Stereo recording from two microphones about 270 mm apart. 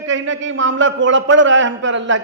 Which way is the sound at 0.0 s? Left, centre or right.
Right.